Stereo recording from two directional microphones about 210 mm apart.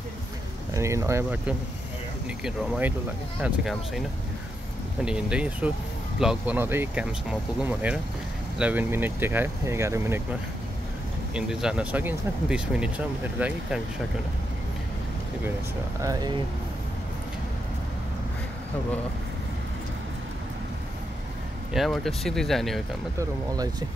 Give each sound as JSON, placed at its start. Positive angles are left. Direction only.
{"t": 0.7, "sound": "speech", "side_deg": -15}
{"t": 5.0, "sound": "speech", "side_deg": -5}
{"t": 11.3, "sound": "speech", "side_deg": -5}
{"t": 16.0, "sound": "speech", "side_deg": -20}
{"t": 21.7, "sound": "speech", "side_deg": 0}
{"t": 23.1, "sound": "speech", "side_deg": -15}